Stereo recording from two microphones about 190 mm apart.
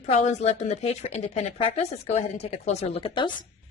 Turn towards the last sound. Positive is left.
turn(degrees=25)  # may be behind; listen again after turning